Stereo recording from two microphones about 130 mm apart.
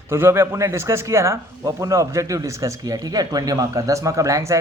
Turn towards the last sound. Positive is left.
turn(degrees=-25)  # may be behind; listen again after turning